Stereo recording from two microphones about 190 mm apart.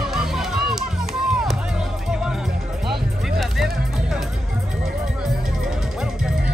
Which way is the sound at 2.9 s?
Centre (ahead or behind).